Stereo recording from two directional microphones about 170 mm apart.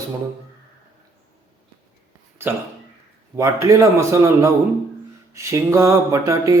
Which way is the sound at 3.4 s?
15° right (ahead or behind).